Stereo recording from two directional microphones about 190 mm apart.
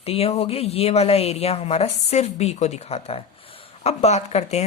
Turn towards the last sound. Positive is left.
turn(degrees=35)  # may be behind; listen again after turning